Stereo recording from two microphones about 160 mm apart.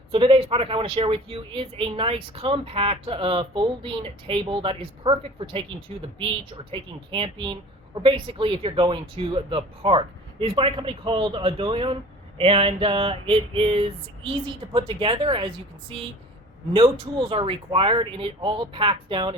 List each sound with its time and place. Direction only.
0.1 s speech: 35° right (ahead or behind)
6.7 s speech: 35° right (ahead or behind)
16.7 s speech: 35° right (ahead or behind)